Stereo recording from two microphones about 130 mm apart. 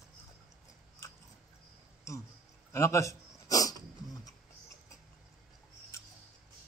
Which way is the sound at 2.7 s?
25° left (ahead or behind).